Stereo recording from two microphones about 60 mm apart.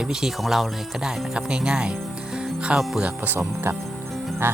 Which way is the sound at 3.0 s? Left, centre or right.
Right.